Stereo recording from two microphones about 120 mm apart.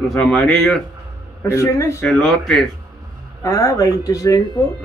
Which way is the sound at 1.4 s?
25° left (ahead or behind).